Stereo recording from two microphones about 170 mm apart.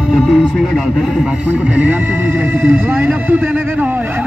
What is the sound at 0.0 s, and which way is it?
Speech, centre (ahead or behind).